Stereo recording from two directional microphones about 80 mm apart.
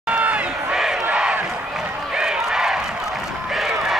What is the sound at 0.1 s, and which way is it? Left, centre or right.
Crowd, centre.